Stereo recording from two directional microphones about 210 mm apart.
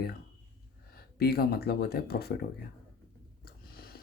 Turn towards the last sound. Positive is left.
turn(degrees=45)  # may be behind; listen again after turning